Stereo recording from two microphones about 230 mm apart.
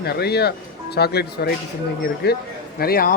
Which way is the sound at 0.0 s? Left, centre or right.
Left.